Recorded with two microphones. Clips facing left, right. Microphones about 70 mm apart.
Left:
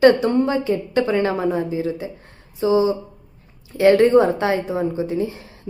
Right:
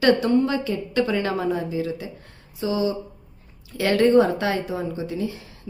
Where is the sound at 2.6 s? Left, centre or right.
Left.